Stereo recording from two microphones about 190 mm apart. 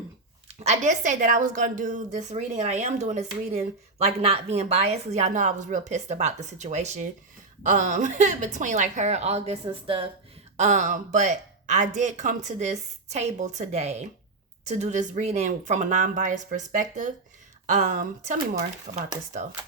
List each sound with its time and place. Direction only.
0.4 s a woman's voice: 35° right (ahead or behind)
10.6 s a woman's voice: 40° right (ahead or behind)